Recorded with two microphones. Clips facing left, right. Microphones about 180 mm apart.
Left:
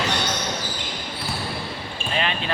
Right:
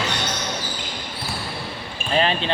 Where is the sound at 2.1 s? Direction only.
35° right (ahead or behind).